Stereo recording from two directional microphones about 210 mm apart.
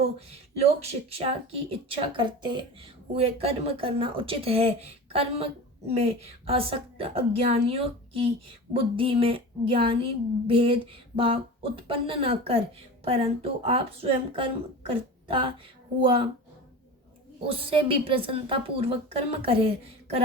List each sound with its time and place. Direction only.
0.8 s speech: 30° right (ahead or behind)
17.5 s speech: 25° right (ahead or behind)